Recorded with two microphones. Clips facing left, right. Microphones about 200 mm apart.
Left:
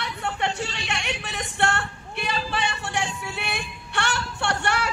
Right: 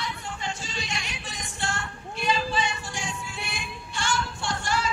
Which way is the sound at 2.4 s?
65° left (ahead or behind).